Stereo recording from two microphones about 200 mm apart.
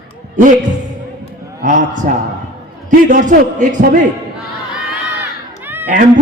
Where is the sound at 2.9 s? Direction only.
40° right (ahead or behind).